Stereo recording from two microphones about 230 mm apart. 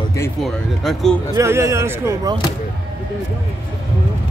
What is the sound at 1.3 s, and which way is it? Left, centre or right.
Speech, centre.